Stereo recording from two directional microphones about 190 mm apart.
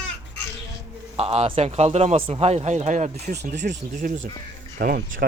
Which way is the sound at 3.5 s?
65° right (ahead or behind).